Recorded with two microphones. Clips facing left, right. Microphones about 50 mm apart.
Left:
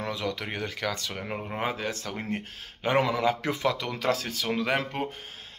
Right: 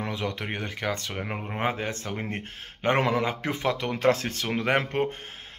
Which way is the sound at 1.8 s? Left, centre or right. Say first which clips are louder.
Right 1 dB; right.